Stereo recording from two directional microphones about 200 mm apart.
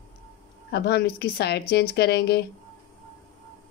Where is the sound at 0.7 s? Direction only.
55° left (ahead or behind).